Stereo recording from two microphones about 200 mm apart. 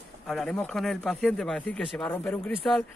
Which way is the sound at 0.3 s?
Centre (ahead or behind).